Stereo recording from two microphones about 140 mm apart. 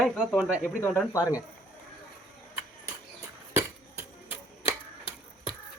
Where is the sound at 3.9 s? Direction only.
15° right (ahead or behind).